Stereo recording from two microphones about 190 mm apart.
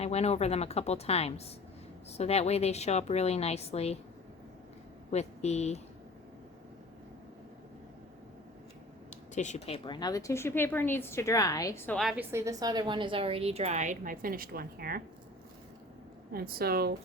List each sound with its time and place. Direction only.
0.0 s a woman's voice: 35° left (ahead or behind)
5.1 s a woman's voice: 35° left (ahead or behind)
9.3 s speech: 40° left (ahead or behind); by 11.9 s 15° left (ahead or behind)
11.9 s a woman's voice: centre (ahead or behind)
12.3 s a woman's voice: 15° right (ahead or behind); by 15.0 s 50° right (ahead or behind)
16.3 s speech: 50° right (ahead or behind)